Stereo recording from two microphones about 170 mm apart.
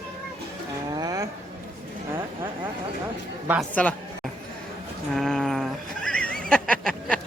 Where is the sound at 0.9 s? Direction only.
20° right (ahead or behind).